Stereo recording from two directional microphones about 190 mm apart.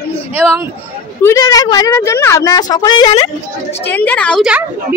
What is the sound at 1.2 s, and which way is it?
A woman's voice, 20° left (ahead or behind).